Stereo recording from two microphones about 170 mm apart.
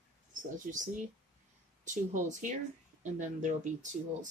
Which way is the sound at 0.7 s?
50° right (ahead or behind).